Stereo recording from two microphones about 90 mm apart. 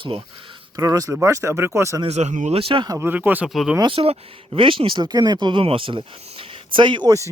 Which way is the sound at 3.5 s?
Centre (ahead or behind).